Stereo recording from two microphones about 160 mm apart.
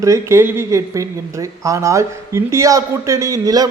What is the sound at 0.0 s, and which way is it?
Speech, 20° right (ahead or behind).